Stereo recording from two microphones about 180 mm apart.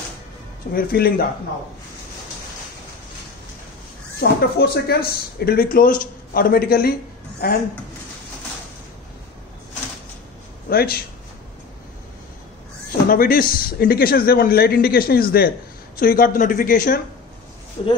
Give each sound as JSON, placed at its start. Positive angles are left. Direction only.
{"t": 0.7, "sound": "a man's voice", "side_deg": 55}
{"t": 4.2, "sound": "a man's voice", "side_deg": 60}
{"t": 10.7, "sound": "speech", "side_deg": 60}
{"t": 13.1, "sound": "a man's voice", "side_deg": 55}
{"t": 17.8, "sound": "speech", "side_deg": 35}